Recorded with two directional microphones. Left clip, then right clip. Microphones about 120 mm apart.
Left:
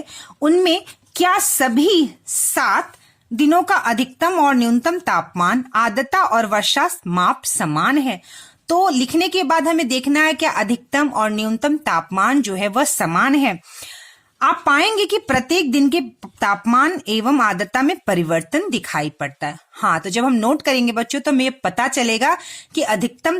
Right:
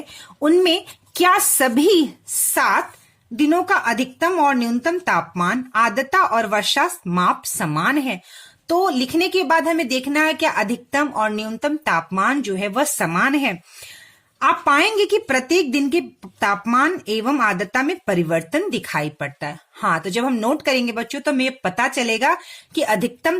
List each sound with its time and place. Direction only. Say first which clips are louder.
0.3 s speech: left 1 dB; 20° left (ahead or behind)
2.6 s a woman's voice: even; 25° left (ahead or behind)
3.3 s speech: left 2 dB; 45° left (ahead or behind)
7.6 s a woman's voice: left 3 dB; 30° left (ahead or behind)
22.7 s a woman's voice: even; 25° left (ahead or behind)